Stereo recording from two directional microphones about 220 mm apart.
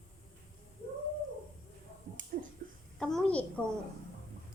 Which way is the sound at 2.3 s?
35° right (ahead or behind).